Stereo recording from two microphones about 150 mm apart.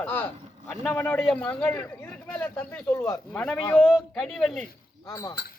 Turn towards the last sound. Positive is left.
turn(degrees=25)  # may be behind; listen again after turning